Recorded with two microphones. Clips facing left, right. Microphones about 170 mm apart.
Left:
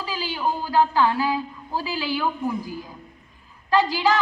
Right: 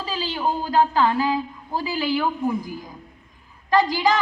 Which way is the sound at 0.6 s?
20° right (ahead or behind).